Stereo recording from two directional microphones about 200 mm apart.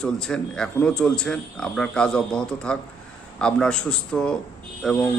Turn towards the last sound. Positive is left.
turn(degrees=5)  # may be behind; listen again after turning